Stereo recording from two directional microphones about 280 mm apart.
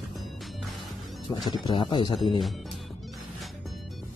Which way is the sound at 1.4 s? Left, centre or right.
Centre.